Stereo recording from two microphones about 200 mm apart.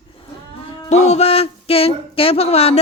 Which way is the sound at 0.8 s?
35° left (ahead or behind).